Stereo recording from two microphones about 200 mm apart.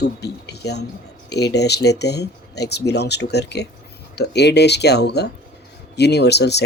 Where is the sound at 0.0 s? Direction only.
55° left (ahead or behind).